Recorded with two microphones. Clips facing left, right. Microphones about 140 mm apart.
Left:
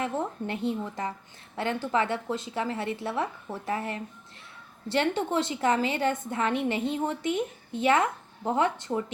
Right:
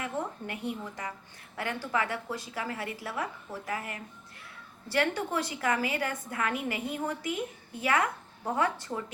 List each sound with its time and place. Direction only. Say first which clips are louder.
0.0 s a woman's voice: left 4 dB; 30° left (ahead or behind)